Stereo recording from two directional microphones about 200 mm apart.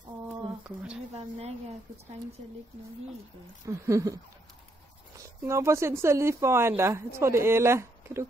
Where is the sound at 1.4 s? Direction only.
30° right (ahead or behind).